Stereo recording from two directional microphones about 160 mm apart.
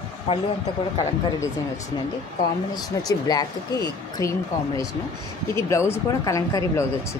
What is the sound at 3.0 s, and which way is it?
Speech, 25° left (ahead or behind).